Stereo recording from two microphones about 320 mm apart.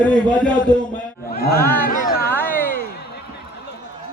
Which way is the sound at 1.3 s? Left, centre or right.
Left.